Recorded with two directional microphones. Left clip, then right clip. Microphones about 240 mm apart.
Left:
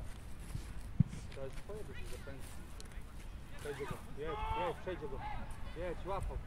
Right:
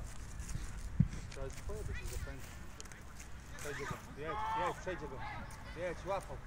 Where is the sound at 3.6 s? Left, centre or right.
Right.